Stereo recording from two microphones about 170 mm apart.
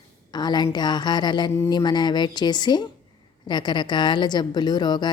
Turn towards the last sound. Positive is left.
turn(degrees=25)  # may be behind; listen again after turning